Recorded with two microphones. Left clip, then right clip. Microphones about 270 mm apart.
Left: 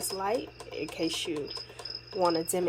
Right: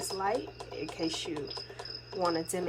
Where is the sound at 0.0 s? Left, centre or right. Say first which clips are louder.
Left 1 dB; centre.